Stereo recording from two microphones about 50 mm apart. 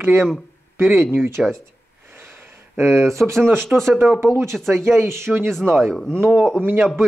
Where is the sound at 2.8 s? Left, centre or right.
Right.